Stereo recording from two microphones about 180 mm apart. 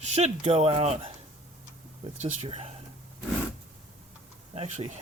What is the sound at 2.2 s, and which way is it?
Speech, 35° right (ahead or behind).